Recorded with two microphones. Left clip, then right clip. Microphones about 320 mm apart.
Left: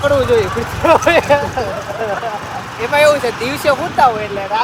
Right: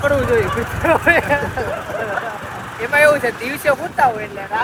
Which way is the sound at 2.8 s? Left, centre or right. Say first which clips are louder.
Left 2 dB; centre.